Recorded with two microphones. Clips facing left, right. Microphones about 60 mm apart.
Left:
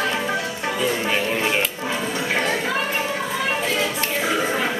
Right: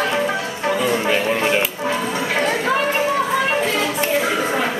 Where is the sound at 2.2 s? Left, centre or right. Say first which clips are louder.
Right 2 dB; centre.